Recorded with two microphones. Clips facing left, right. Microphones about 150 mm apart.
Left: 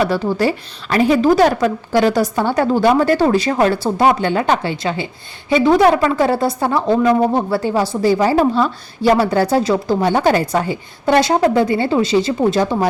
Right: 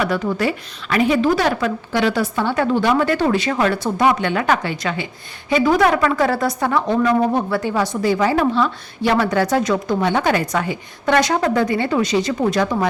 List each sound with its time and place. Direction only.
0.0 s a woman's voice: 30° left (ahead or behind)